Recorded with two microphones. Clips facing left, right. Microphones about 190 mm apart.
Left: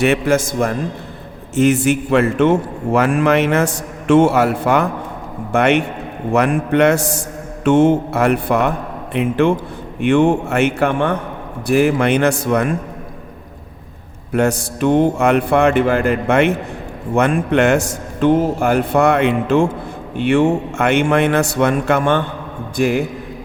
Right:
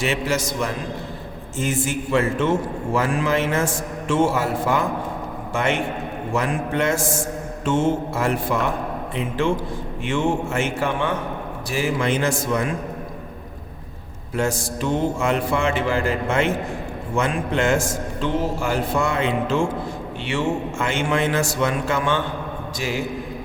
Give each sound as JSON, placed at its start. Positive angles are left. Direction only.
{"t": 0.0, "sound": "a man's voice", "side_deg": 55}
{"t": 1.5, "sound": "a man's voice", "side_deg": 70}
{"t": 14.3, "sound": "a man's voice", "side_deg": 65}